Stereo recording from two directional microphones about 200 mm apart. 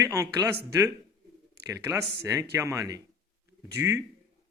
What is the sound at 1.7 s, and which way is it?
Speech, 15° right (ahead or behind).